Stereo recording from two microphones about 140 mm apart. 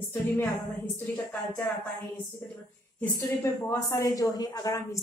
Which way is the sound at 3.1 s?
20° left (ahead or behind).